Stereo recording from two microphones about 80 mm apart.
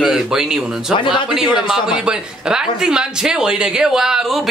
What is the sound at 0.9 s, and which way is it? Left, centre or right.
Speech, left.